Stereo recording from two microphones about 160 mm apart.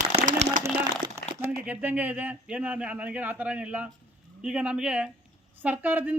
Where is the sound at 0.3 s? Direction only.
55° right (ahead or behind).